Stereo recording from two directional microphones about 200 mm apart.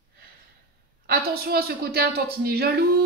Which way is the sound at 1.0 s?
50° right (ahead or behind).